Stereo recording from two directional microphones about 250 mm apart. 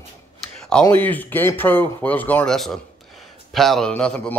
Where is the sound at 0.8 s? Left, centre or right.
Centre.